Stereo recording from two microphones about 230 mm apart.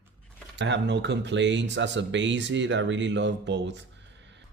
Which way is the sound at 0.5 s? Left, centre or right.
Right.